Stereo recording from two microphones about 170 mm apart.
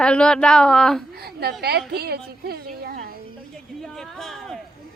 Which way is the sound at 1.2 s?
65° right (ahead or behind).